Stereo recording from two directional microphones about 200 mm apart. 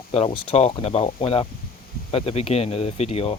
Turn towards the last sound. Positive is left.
turn(degrees=30)  # may be behind; listen again after turning